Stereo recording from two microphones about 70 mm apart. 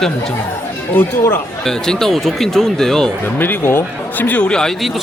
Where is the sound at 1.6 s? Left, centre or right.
Centre.